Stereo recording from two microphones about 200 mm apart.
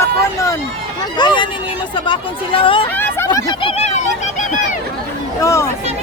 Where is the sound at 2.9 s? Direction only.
15° left (ahead or behind); by 4.5 s 40° left (ahead or behind).